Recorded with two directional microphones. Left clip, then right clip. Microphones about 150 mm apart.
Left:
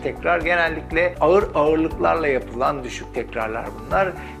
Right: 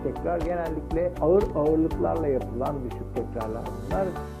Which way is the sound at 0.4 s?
35° right (ahead or behind).